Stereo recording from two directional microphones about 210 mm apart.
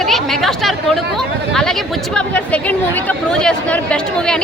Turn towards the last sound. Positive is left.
turn(degrees=5)  # may be behind; listen again after turning